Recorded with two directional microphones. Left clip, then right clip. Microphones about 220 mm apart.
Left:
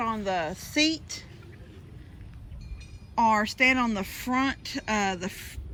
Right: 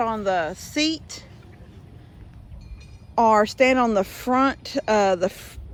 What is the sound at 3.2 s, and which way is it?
Speech, 25° right (ahead or behind).